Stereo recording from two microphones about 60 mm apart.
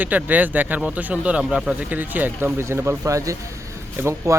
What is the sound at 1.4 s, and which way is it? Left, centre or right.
Speech, centre.